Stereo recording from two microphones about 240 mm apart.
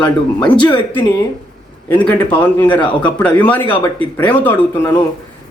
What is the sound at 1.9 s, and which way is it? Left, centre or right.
Speech, centre.